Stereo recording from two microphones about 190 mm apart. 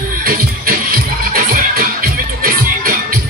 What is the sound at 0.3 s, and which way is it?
Music, 50° right (ahead or behind).